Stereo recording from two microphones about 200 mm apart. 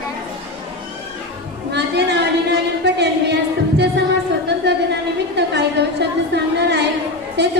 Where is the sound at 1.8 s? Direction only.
60° right (ahead or behind).